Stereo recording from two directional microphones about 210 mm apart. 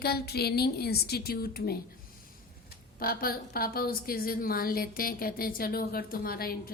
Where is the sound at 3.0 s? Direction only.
45° left (ahead or behind).